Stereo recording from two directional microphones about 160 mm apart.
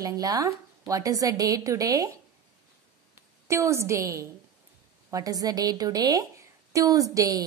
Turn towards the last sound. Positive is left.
turn(degrees=-20)  # may be behind; listen again after turning